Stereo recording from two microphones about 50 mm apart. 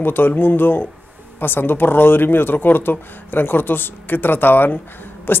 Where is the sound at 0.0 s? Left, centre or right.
Left.